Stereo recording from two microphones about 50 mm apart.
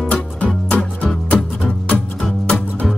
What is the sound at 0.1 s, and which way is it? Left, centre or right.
Music, left.